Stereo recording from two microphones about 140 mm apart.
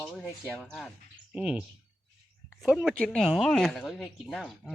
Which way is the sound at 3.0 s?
5° left (ahead or behind).